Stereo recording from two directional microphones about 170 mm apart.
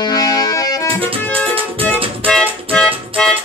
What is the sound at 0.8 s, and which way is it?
Music, 30° right (ahead or behind).